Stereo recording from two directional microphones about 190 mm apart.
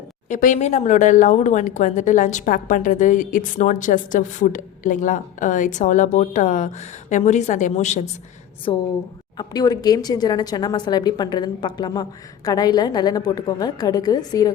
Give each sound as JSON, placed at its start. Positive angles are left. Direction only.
{"t": 0.3, "sound": "speech", "side_deg": 40}
{"t": 8.7, "sound": "a woman's voice", "side_deg": 25}